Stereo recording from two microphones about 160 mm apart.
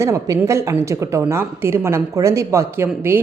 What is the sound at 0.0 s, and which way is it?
A woman's voice, 20° right (ahead or behind).